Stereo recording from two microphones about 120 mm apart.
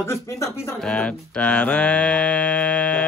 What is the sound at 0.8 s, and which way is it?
Mantra, 10° left (ahead or behind).